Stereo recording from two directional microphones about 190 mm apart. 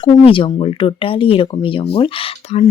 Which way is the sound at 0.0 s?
25° left (ahead or behind).